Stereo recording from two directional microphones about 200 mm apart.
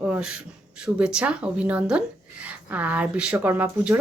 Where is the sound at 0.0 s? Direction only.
5° right (ahead or behind).